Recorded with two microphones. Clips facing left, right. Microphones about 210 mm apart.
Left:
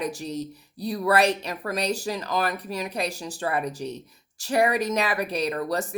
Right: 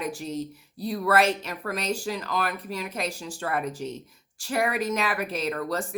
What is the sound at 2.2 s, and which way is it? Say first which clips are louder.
Speech: left 5 dB; 40° left (ahead or behind).